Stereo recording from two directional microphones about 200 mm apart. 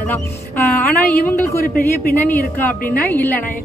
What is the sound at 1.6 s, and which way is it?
Speech, 45° left (ahead or behind).